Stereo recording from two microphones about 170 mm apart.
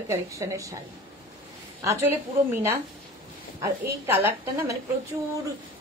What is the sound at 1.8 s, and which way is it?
Speech, 15° right (ahead or behind).